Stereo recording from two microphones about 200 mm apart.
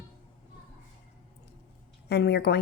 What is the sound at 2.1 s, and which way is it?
Speech, 55° left (ahead or behind).